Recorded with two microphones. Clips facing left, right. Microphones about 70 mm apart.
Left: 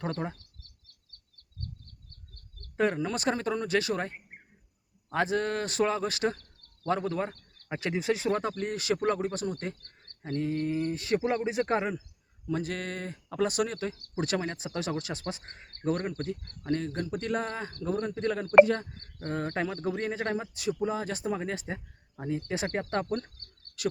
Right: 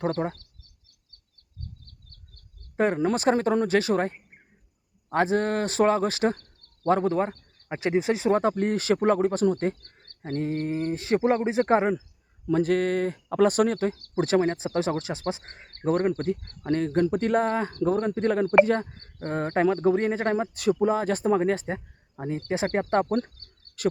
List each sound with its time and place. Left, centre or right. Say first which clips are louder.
0.0 s speech: right 7 dB; right
2.7 s speech: right 5 dB; right
5.1 s speech: right 5 dB; right
7.1 s speech: right 6 dB; centre
8.4 s speech: right 8 dB; right
12.5 s speech: right 10 dB; right
21.6 s a sound: right 6 dB; right
22.3 s speech: right 5 dB; right